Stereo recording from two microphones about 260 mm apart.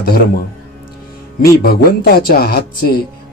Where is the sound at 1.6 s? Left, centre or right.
Left.